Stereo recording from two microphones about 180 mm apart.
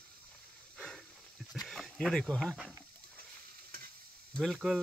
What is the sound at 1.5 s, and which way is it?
Speech, centre (ahead or behind).